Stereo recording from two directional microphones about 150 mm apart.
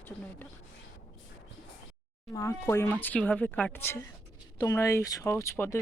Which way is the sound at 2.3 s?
20° left (ahead or behind).